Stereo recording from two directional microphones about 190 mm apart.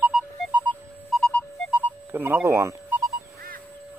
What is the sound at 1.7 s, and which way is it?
Telephone dialing, 10° right (ahead or behind).